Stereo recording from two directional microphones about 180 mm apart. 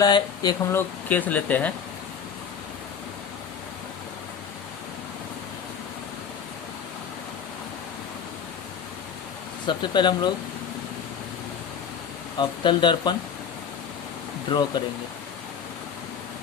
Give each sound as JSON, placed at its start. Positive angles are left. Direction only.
{"t": 0.0, "sound": "speech", "side_deg": 20}
{"t": 0.8, "sound": "speech", "side_deg": 10}
{"t": 9.6, "sound": "speech", "side_deg": 25}
{"t": 12.4, "sound": "speech", "side_deg": 25}
{"t": 14.5, "sound": "speech", "side_deg": 25}